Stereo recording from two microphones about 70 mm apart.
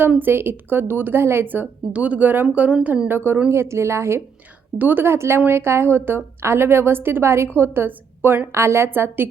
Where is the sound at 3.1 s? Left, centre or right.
Right.